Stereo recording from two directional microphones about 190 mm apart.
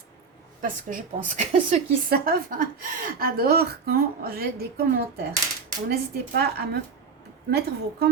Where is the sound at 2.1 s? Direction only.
50° right (ahead or behind).